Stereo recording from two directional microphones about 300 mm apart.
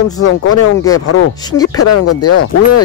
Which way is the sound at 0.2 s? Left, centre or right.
Left.